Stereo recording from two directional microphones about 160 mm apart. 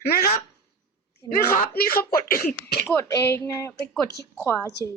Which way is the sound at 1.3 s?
70° left (ahead or behind).